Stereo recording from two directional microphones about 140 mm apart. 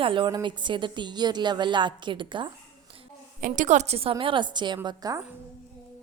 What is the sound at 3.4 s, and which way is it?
A woman's voice, 65° right (ahead or behind).